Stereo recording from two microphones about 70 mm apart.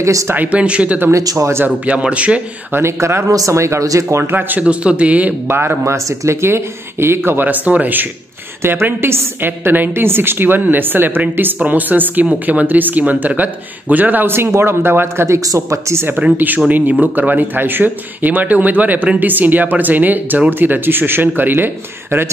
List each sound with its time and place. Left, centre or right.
0.0 s speech: right
0.3 s speech: right
1.1 s speech: right
1.9 s speech: centre
2.7 s speech: right
4.3 s speech: right
5.5 s speech: right
16.3 s speech: right